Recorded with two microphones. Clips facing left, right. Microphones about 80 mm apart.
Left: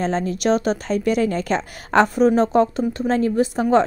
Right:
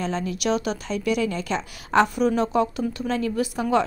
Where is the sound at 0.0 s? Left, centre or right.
Left.